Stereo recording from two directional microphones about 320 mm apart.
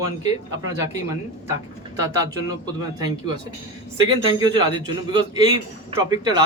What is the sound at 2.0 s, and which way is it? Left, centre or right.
A man's voice, centre.